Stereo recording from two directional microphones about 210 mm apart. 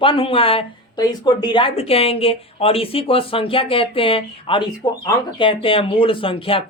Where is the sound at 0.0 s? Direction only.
25° left (ahead or behind).